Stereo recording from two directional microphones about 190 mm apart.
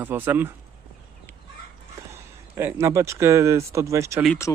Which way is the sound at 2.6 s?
15° right (ahead or behind).